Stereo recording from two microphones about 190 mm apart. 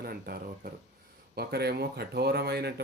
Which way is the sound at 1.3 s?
55° right (ahead or behind).